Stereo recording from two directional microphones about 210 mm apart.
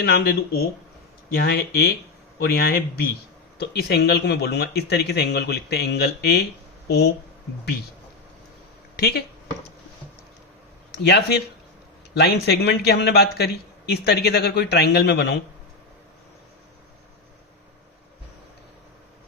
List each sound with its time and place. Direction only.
0.0 s a man's voice: 45° left (ahead or behind)
10.9 s a man's voice: 50° left (ahead or behind)